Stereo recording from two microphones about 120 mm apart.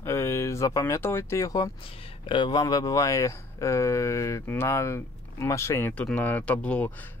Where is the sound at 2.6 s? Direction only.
30° left (ahead or behind).